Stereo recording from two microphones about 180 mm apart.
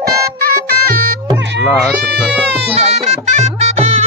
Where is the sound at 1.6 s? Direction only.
Centre (ahead or behind).